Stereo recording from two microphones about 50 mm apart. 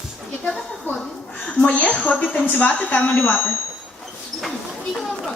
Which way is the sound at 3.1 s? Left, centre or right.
Left.